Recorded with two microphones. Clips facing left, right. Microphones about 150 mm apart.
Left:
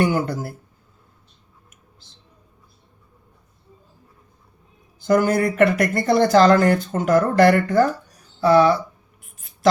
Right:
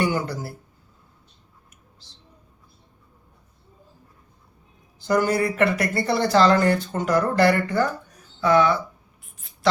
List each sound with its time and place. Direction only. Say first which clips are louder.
0.0 s speech: left 4 dB; 50° left (ahead or behind)
5.0 s speech: left 3 dB; 50° left (ahead or behind)
8.4 s speech: left 4 dB; 35° left (ahead or behind)